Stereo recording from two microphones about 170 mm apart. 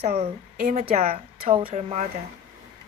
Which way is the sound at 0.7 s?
40° right (ahead or behind).